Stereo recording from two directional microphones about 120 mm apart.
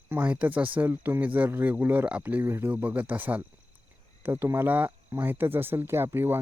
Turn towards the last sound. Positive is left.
turn(degrees=-20)  # may be behind; listen again after turning